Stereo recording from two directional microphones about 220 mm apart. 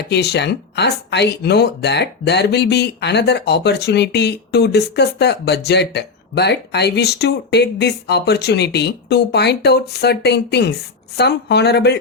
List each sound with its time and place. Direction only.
0.1 s speech: 50° left (ahead or behind)